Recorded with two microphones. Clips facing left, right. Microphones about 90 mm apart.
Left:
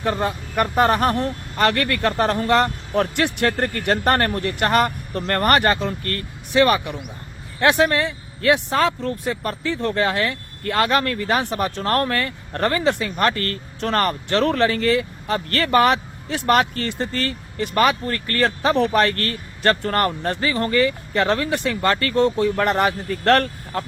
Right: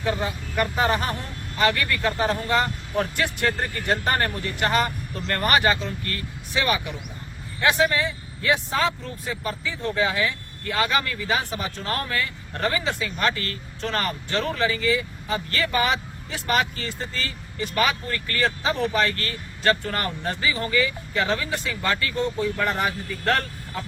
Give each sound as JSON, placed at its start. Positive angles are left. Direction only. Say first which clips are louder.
{"t": 0.0, "sound": "speech", "louder": "left 4 dB", "side_deg": 50}